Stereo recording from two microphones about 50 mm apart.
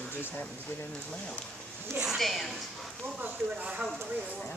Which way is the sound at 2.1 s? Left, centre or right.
Centre.